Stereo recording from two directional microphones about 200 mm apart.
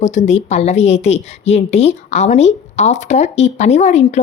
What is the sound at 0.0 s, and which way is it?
A woman's voice, 35° left (ahead or behind).